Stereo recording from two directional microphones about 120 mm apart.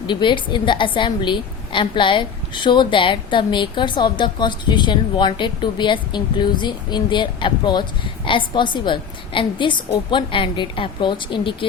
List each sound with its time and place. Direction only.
0.1 s a woman's voice: 40° left (ahead or behind)